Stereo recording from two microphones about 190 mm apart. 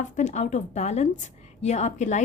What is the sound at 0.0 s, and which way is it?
A woman's voice, 40° left (ahead or behind).